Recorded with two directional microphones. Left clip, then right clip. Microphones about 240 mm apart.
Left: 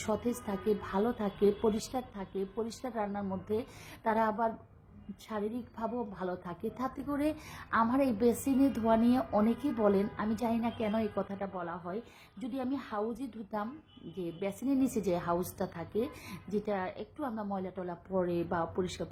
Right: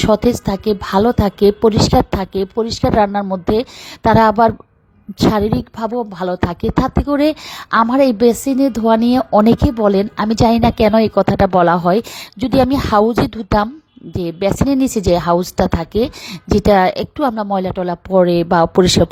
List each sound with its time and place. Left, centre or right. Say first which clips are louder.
0.1 s a woman's voice: right 18 dB; right